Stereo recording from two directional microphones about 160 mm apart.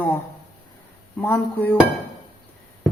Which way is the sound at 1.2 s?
10° left (ahead or behind).